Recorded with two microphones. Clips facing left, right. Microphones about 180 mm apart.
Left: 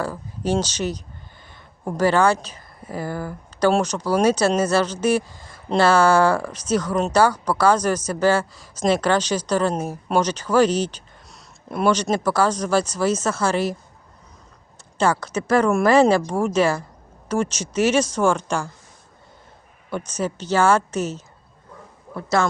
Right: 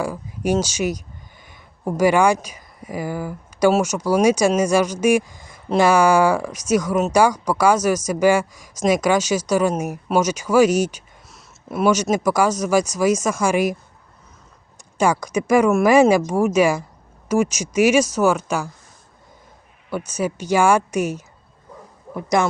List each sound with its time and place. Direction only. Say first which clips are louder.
0.0 s speech: right 2 dB; 10° right (ahead or behind)
14.9 s speech: right 2 dB; 15° right (ahead or behind)
19.9 s speech: right 2 dB; 10° right (ahead or behind)